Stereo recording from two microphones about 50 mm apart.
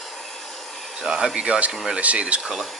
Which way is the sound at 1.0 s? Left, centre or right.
Centre.